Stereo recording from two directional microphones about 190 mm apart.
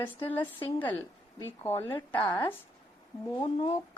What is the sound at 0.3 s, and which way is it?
Speech, 25° left (ahead or behind).